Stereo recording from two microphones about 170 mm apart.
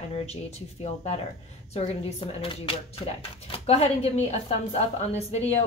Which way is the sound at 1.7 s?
35° left (ahead or behind).